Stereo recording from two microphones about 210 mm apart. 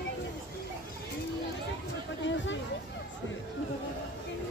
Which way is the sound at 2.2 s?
60° left (ahead or behind).